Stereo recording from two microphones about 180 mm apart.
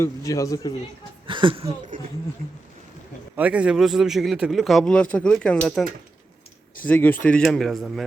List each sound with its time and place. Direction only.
0.0 s a man's voice: 15° left (ahead or behind)
1.3 s speech: 30° right (ahead or behind)
1.9 s speech: 50° right (ahead or behind)
3.3 s a man's voice: 5° right (ahead or behind)